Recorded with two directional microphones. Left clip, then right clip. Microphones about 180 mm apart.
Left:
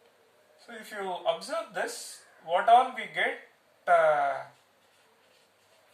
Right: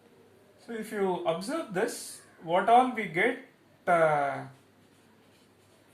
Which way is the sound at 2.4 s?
15° left (ahead or behind).